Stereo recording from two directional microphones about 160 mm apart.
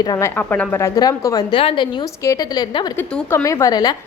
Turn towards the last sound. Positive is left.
turn(degrees=25)  # may be behind; listen again after turning